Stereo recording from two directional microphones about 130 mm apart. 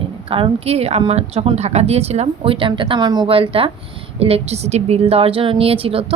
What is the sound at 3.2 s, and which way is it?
A woman's voice, 45° right (ahead or behind).